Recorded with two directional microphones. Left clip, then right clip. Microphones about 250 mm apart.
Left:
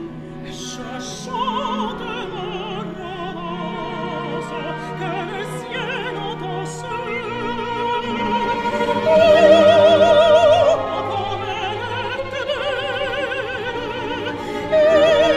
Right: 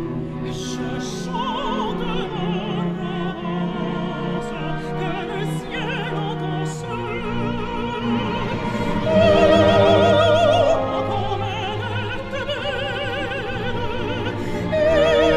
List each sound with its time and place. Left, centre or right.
1.4 s music: centre
9.2 s opera: centre
14.8 s music: centre